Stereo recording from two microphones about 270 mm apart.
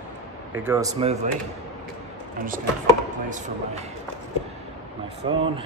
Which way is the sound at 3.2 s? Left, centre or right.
Right.